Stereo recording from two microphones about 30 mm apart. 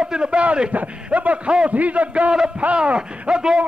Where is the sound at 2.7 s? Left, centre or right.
Right.